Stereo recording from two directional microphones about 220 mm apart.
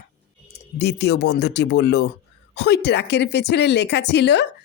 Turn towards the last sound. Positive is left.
turn(degrees=50)  # may be behind; listen again after turning